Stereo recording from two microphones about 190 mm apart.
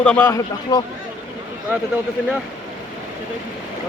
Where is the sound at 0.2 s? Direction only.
15° left (ahead or behind).